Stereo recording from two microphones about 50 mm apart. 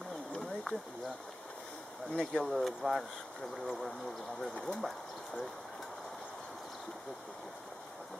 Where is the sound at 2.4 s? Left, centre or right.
Centre.